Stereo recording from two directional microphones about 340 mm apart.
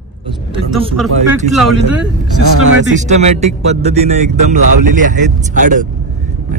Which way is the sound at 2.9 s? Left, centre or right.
Centre.